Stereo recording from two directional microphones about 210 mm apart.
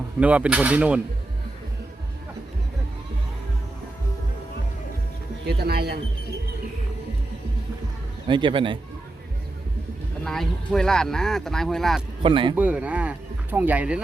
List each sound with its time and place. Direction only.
0.2 s speech: 5° right (ahead or behind)
5.5 s speech: 50° right (ahead or behind)
8.3 s speech: 25° right (ahead or behind)
10.2 s speech: centre (ahead or behind)
12.2 s speech: 25° right (ahead or behind)
12.5 s speech: 5° right (ahead or behind)